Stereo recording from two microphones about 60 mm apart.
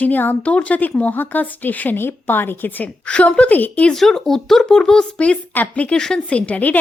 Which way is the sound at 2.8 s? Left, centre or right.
Centre.